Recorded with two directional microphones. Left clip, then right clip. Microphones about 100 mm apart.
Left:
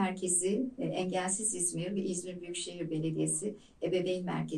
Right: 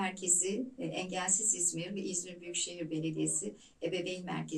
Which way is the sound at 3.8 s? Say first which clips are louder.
Left 4 dB; 25° left (ahead or behind).